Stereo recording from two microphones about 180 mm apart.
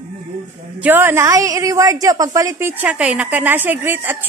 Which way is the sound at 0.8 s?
10° right (ahead or behind).